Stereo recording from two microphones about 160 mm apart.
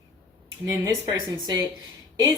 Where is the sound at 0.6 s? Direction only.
20° right (ahead or behind).